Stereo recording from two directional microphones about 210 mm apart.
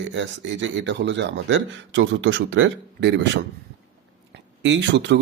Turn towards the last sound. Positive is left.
turn(degrees=-60)  # may be behind; listen again after turning